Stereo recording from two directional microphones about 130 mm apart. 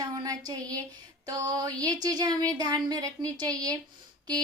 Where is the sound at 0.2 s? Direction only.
30° right (ahead or behind).